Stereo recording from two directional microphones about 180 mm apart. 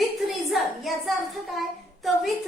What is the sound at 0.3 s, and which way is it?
A child's voice, centre (ahead or behind).